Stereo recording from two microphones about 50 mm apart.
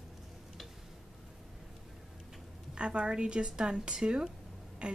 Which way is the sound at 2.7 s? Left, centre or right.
Right.